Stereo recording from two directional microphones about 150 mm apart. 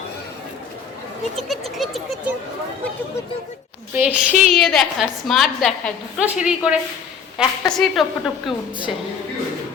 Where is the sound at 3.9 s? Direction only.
10° right (ahead or behind).